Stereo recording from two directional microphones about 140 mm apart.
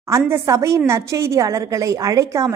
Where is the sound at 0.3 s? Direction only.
20° right (ahead or behind).